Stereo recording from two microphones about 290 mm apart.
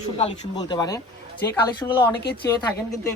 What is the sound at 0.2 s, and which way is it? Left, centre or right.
Speech, centre.